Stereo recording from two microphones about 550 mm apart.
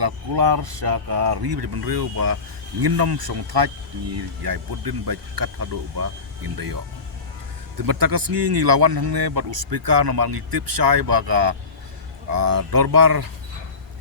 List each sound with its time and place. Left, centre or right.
0.0 s speech: right
7.8 s speech: right